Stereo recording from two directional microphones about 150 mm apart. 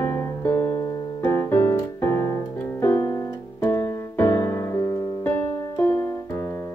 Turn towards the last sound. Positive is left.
turn(degrees=15)  # may be behind; listen again after turning